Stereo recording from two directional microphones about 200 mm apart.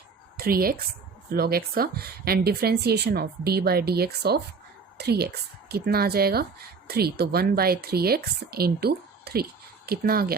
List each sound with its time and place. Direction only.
0.3 s speech: 50° right (ahead or behind)